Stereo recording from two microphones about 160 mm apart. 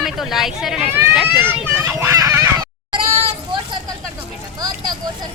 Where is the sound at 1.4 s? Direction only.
20° right (ahead or behind).